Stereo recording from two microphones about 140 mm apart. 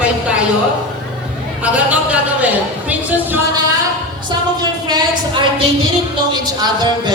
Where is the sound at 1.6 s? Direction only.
10° right (ahead or behind).